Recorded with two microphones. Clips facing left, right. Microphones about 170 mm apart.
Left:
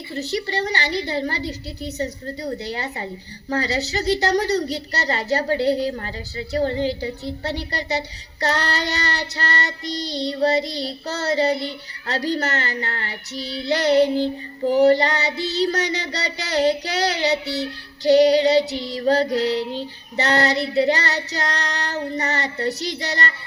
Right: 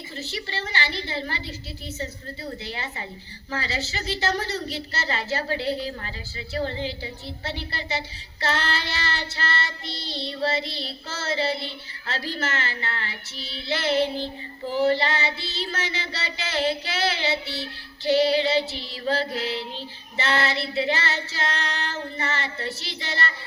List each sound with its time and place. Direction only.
0.1 s a woman's voice: 40° left (ahead or behind)